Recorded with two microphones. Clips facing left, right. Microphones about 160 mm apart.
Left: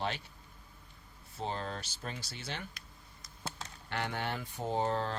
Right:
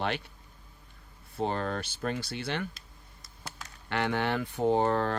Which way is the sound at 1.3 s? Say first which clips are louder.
Right 7 dB; 60° right (ahead or behind).